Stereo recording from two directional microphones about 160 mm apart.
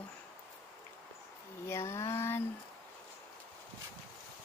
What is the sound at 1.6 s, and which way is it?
Speech, 15° left (ahead or behind).